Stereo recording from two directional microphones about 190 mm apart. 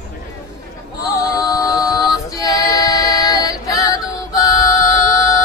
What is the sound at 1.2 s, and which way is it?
Music, 20° left (ahead or behind).